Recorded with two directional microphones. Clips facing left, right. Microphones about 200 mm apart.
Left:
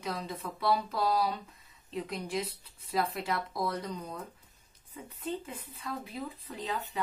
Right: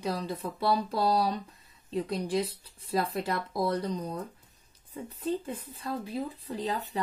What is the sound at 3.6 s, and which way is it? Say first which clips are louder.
Speech: right 5 dB; 35° right (ahead or behind).